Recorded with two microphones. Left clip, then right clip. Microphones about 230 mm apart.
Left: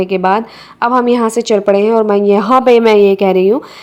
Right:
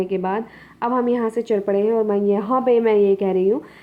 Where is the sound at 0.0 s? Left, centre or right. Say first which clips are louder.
Left 10 dB; left.